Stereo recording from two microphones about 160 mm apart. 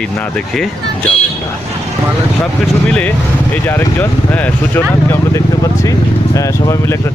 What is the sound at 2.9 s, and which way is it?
Speech, 10° left (ahead or behind).